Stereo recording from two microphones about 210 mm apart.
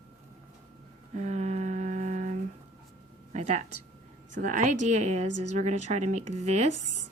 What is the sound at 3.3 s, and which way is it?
Speech, 35° right (ahead or behind).